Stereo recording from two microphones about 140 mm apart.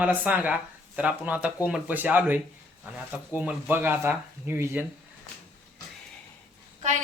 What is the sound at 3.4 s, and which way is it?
Speech, 10° right (ahead or behind).